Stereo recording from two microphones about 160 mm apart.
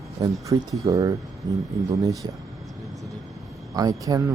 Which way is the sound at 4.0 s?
25° right (ahead or behind).